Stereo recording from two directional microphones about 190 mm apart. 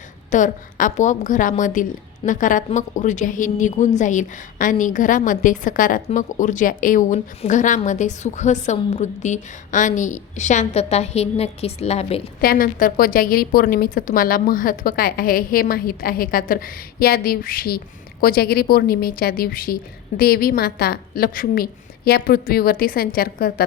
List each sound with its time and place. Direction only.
0.3 s a woman's voice: 40° left (ahead or behind)
12.4 s a woman's voice: 50° left (ahead or behind)